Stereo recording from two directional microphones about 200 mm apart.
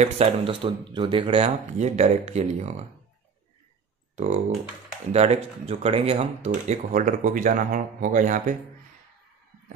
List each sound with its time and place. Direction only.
0.0 s speech: 30° right (ahead or behind)
4.1 s a sound: 30° right (ahead or behind)
5.1 s speech: 30° right (ahead or behind)